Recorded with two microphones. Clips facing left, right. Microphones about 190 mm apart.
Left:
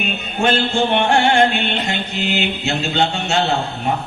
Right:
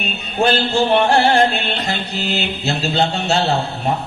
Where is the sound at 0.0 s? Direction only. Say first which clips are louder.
Right 1 dB; 35° right (ahead or behind).